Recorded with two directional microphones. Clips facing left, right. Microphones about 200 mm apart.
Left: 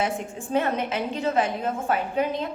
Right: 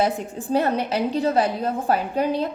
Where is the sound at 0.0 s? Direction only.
35° right (ahead or behind).